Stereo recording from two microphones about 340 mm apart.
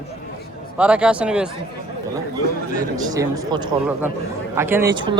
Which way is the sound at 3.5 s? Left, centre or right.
Centre.